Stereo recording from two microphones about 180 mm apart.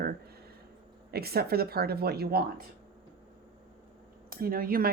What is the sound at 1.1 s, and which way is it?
A woman's voice, 60° right (ahead or behind).